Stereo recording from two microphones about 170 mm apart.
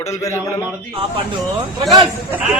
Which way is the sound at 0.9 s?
35° right (ahead or behind).